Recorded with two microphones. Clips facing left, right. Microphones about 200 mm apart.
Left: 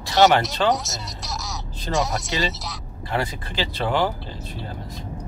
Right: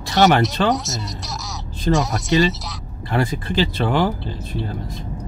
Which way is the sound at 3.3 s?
50° right (ahead or behind).